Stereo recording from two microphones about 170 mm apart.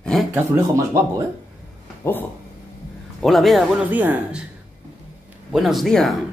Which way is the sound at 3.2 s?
Centre (ahead or behind).